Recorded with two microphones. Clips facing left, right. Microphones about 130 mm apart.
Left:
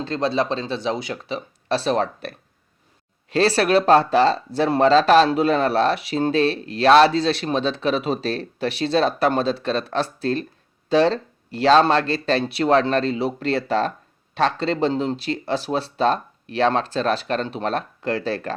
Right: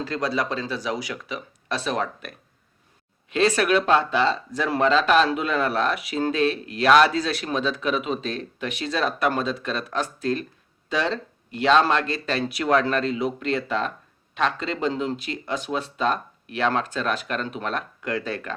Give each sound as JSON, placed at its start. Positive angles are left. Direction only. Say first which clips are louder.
{"t": 0.0, "sound": "speech", "louder": "left 4 dB", "side_deg": 25}
{"t": 3.3, "sound": "speech", "louder": "left 3 dB", "side_deg": 35}